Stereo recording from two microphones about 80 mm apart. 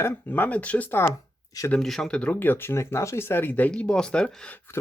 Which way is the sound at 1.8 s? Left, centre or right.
Centre.